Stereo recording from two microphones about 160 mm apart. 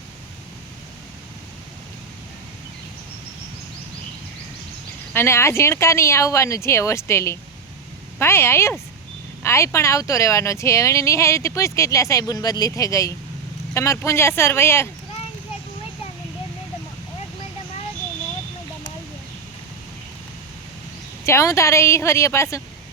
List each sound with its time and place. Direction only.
5.1 s speech: 15° left (ahead or behind)
21.2 s speech: 20° left (ahead or behind)